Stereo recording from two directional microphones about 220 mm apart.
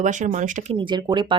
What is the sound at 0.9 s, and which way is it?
Speech, 20° right (ahead or behind).